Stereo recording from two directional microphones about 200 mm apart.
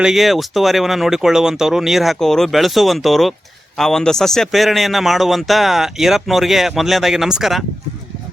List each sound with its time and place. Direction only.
0.0 s a man's voice: centre (ahead or behind)